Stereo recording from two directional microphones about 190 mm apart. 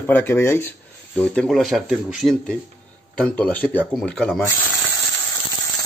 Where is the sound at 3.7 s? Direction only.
10° right (ahead or behind).